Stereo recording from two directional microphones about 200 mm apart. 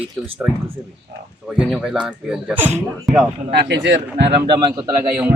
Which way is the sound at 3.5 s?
60° right (ahead or behind).